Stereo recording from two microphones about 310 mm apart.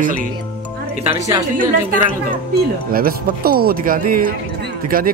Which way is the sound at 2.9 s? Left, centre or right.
Right.